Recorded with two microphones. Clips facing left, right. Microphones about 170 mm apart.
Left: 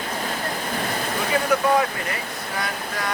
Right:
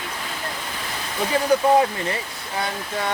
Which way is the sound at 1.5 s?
30° right (ahead or behind).